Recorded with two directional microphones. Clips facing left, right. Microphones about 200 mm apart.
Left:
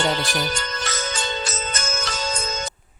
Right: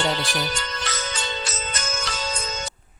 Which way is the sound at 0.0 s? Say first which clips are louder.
Left 2 dB; 45° left (ahead or behind).